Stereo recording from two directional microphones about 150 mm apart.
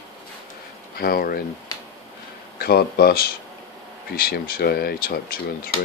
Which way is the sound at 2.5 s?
90° left.